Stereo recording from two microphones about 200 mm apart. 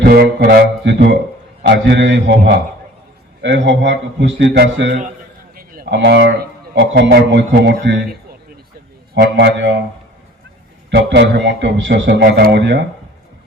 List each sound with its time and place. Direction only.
0.0 s a man's voice: 55° right (ahead or behind)
5.5 s a sound: 45° right (ahead or behind)
6.7 s a man's voice: 60° right (ahead or behind)
9.1 s a man's voice: 60° right (ahead or behind)
10.9 s a man's voice: 60° right (ahead or behind)